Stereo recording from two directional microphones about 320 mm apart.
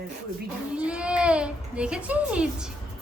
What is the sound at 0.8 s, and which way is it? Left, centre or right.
Speech, centre.